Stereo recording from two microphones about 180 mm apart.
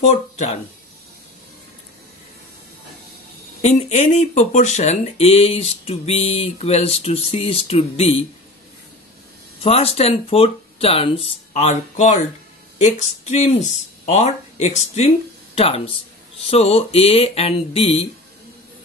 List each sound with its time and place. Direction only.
0.0 s speech: 40° left (ahead or behind)
3.6 s speech: 40° left (ahead or behind)
9.6 s speech: 35° left (ahead or behind)